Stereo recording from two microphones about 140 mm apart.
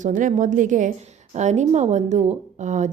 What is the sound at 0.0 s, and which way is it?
A woman's voice, 65° right (ahead or behind).